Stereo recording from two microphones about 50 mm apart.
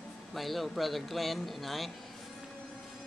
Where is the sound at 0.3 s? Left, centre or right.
Centre.